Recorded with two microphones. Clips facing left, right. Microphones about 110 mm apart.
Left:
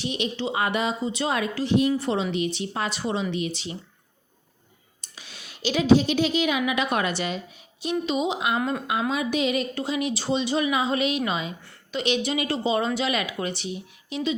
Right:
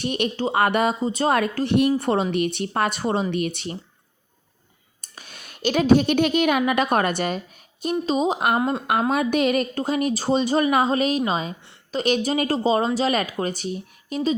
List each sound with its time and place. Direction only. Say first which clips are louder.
0.0 s a woman's voice: right 4 dB; 50° right (ahead or behind)
5.1 s a woman's voice: right 2 dB; 50° right (ahead or behind)